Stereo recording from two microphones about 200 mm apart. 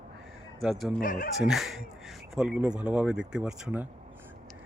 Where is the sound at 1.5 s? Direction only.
Centre (ahead or behind).